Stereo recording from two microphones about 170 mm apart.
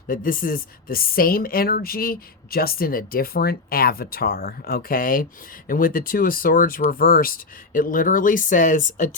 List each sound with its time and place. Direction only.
0.1 s speech: 55° left (ahead or behind)